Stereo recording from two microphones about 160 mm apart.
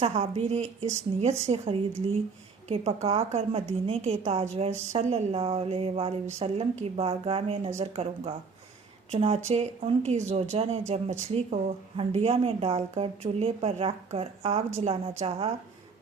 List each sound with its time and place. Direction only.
0.0 s speech: 40° right (ahead or behind)